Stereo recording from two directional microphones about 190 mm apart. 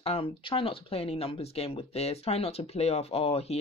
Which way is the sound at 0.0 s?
30° left (ahead or behind).